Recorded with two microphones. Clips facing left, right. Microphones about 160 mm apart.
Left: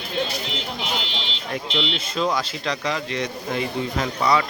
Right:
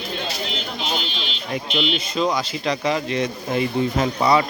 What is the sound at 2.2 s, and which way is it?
Speech, 5° right (ahead or behind).